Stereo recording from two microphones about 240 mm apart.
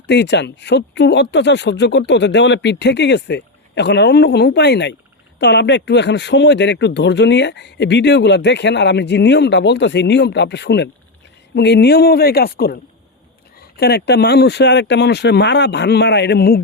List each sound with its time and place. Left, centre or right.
0.1 s speech: left